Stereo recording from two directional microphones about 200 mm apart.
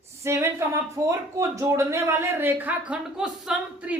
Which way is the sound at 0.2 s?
15° right (ahead or behind).